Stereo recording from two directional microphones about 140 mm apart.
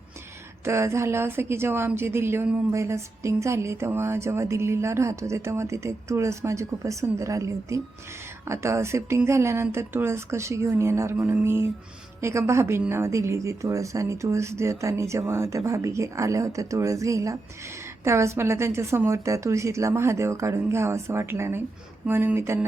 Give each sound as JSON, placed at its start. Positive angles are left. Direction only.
{"t": 0.6, "sound": "a woman's voice", "side_deg": -20}